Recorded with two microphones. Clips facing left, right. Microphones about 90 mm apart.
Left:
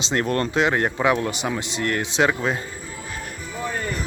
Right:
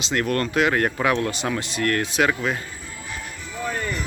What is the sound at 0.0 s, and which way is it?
Speech, 30° left (ahead or behind).